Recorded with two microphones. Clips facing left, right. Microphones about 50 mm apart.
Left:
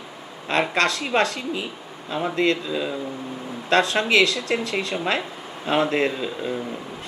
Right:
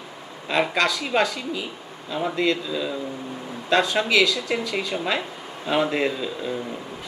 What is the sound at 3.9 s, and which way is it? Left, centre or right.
Speech, centre.